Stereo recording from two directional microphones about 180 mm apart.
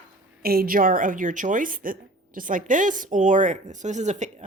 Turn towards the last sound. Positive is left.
turn(degrees=-40)  # may be behind; listen again after turning